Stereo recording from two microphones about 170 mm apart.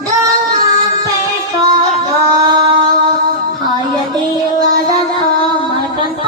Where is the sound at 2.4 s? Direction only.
25° right (ahead or behind).